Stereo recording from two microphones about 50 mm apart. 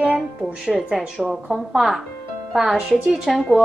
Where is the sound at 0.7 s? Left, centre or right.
Centre.